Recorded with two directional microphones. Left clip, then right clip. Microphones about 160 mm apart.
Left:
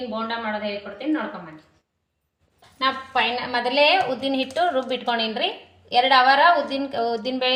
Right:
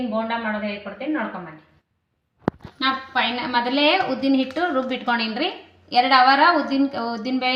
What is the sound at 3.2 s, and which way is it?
A woman's voice, 75° left (ahead or behind).